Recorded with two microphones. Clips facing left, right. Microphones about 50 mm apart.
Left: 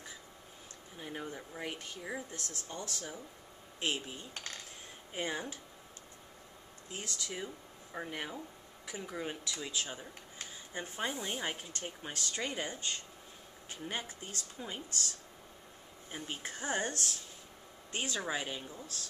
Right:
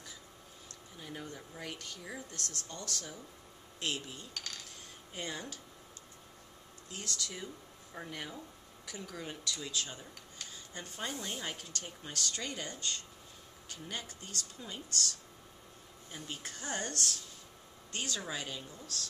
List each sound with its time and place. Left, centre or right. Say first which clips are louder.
0.9 s speech: left 3 dB; left
6.9 s speech: even; centre
16.1 s speech: left 3 dB; left